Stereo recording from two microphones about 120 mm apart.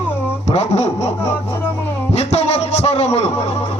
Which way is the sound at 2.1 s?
65° left (ahead or behind).